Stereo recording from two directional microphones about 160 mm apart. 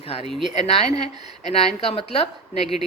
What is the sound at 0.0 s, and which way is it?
Speech, 40° left (ahead or behind).